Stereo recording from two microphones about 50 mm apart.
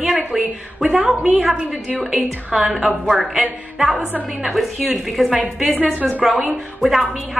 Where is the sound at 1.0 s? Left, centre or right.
Right.